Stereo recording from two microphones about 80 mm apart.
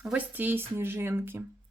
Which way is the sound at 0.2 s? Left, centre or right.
Right.